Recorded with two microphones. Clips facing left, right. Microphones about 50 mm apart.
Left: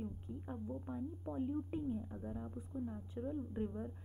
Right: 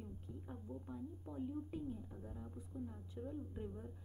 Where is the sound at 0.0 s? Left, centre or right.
Left.